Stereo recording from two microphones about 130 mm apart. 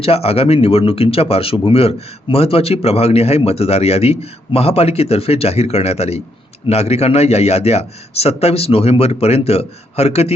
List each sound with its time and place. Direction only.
0.0 s speech: 50° left (ahead or behind)